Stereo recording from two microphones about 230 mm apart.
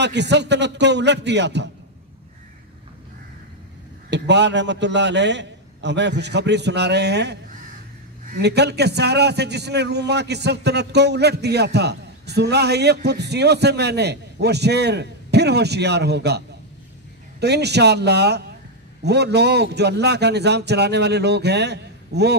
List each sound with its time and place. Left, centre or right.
0.0 s a man's voice: right
4.1 s a man's voice: right